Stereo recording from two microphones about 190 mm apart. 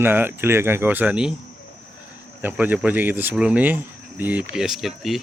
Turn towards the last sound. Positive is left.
turn(degrees=0)  # may be behind; listen again after turning